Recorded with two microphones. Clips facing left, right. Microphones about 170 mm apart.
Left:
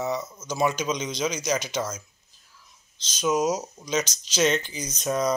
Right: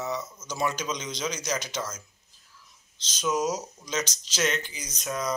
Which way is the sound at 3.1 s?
10° left (ahead or behind).